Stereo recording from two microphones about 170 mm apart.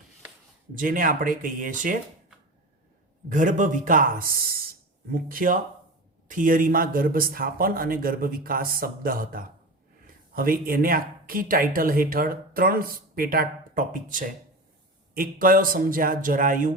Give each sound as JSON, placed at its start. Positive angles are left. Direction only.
{"t": 0.8, "sound": "speech", "side_deg": -55}
{"t": 3.2, "sound": "speech", "side_deg": -50}